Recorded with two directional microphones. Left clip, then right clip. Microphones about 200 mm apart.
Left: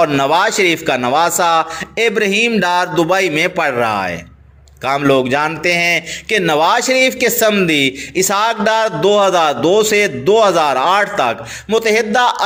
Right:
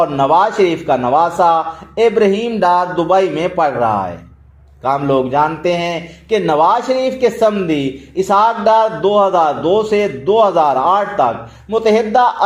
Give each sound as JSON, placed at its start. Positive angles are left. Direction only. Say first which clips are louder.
{"t": 0.0, "sound": "a man's voice", "louder": "right 1 dB", "side_deg": 25}
{"t": 2.6, "sound": "a sound", "louder": "right 2 dB", "side_deg": 40}
{"t": 2.8, "sound": "a man's voice", "louder": "right 1 dB", "side_deg": 25}
{"t": 4.9, "sound": "a man's voice", "louder": "left 1 dB", "side_deg": 25}